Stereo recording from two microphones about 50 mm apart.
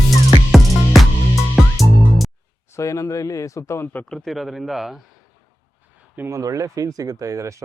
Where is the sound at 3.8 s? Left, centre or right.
Left.